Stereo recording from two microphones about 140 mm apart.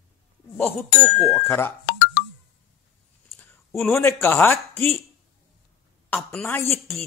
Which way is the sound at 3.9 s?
20° left (ahead or behind).